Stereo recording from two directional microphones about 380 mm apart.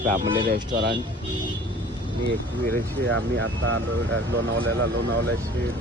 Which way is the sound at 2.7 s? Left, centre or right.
Right.